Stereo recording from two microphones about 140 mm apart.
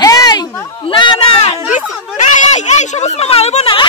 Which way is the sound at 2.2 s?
60° left (ahead or behind).